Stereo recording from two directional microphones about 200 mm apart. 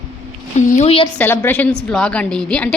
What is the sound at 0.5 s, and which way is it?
Speech, 35° left (ahead or behind).